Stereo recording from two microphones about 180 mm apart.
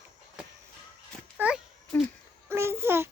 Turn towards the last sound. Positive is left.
turn(degrees=-15)  # may be behind; listen again after turning